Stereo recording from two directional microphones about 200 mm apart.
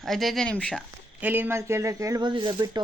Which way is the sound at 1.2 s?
10° right (ahead or behind).